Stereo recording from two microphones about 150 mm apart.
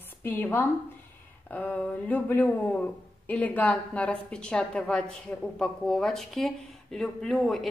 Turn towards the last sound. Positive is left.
turn(degrees=0)  # may be behind; listen again after turning